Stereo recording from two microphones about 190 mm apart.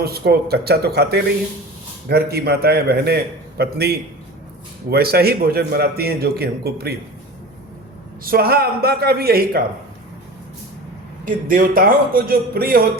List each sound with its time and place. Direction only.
0.0 s a man's voice: 55° right (ahead or behind)
8.2 s a man's voice: 50° right (ahead or behind)
11.3 s a man's voice: 45° right (ahead or behind)